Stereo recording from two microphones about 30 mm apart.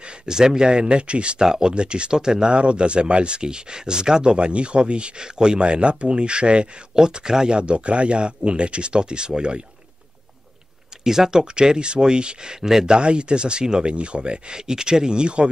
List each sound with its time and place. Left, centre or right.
0.3 s speech: right
1.4 s speech: right
7.0 s speech: right
7.5 s speech: right
11.1 s speech: centre; by 14.6 s right
14.7 s speech: right